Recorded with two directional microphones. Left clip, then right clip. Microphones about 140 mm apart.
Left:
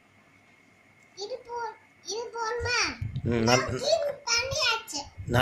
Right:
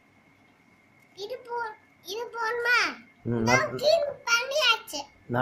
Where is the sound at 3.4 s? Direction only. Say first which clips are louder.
Right 3 dB; 10° right (ahead or behind).